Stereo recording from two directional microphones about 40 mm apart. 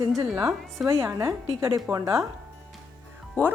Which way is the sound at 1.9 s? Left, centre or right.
Right.